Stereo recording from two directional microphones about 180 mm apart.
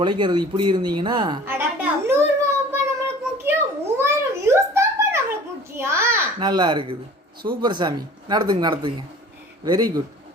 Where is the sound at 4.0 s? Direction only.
15° right (ahead or behind).